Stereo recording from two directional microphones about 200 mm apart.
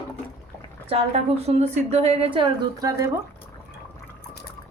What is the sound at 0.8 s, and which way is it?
A woman's voice, 30° right (ahead or behind).